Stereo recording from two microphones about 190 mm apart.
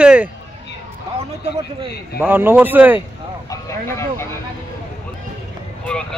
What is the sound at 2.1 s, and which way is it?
Speech, 10° right (ahead or behind).